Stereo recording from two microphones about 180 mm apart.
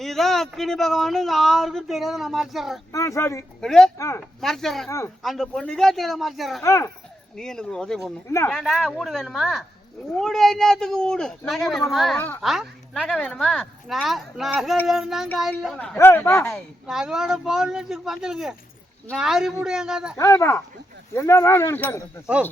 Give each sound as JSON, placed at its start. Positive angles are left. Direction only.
{"t": 0.0, "sound": "a woman's voice", "side_deg": 0}
{"t": 2.9, "sound": "speech", "side_deg": 15}
{"t": 3.6, "sound": "a woman's voice", "side_deg": 5}
{"t": 3.9, "sound": "speech", "side_deg": 15}
{"t": 4.4, "sound": "a woman's voice", "side_deg": 0}
{"t": 4.9, "sound": "speech", "side_deg": 15}
{"t": 5.2, "sound": "a woman's voice", "side_deg": 0}
{"t": 6.6, "sound": "speech", "side_deg": 15}
{"t": 7.3, "sound": "a woman's voice", "side_deg": 5}
{"t": 8.3, "sound": "speech", "side_deg": 15}
{"t": 8.5, "sound": "a woman's voice", "side_deg": 0}
{"t": 16.8, "sound": "a woman's voice", "side_deg": -5}
{"t": 20.1, "sound": "speech", "side_deg": 15}